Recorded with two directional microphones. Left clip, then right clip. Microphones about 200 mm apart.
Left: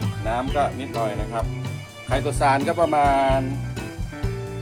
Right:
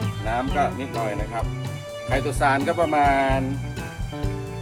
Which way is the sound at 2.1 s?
20° left (ahead or behind).